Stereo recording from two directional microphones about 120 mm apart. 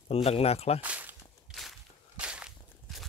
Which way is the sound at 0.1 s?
55° left (ahead or behind).